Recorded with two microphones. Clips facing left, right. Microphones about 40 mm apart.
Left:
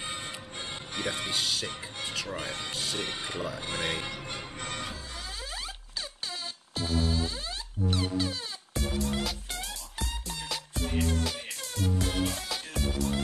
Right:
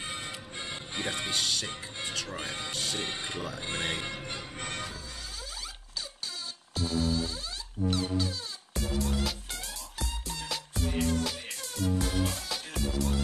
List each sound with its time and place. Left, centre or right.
0.0 s music: centre
2.0 s speech: centre
4.6 s music: centre
6.7 s music: left
8.7 s music: centre